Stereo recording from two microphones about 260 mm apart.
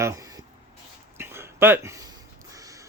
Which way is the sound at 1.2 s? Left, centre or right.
Centre.